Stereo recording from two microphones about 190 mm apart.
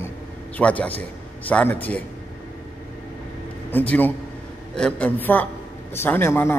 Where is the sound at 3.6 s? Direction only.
10° left (ahead or behind).